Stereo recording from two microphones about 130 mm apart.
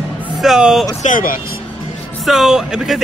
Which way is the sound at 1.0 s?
90° left.